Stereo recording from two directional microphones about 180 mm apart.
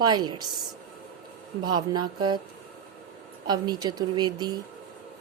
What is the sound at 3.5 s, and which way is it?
Speech, 25° right (ahead or behind).